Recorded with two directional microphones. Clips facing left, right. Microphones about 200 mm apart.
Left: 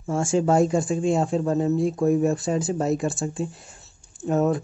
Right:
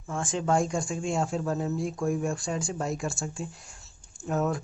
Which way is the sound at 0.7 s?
5° left (ahead or behind).